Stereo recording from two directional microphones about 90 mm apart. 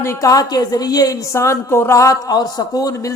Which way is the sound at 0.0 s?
35° left (ahead or behind).